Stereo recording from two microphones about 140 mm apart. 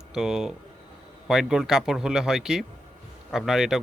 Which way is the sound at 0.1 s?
5° right (ahead or behind).